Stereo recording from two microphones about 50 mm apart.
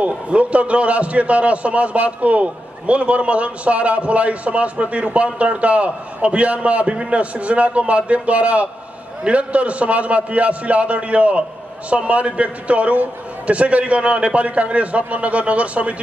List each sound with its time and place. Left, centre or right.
0.0 s a man's voice: right